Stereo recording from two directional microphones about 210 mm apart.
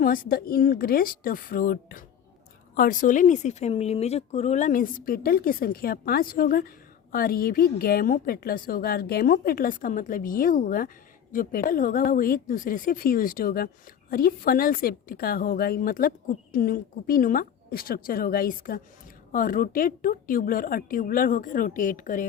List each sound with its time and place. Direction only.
0.0 s a woman's voice: 45° left (ahead or behind)